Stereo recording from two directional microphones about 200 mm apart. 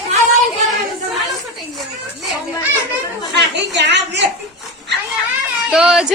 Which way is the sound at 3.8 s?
60° right (ahead or behind).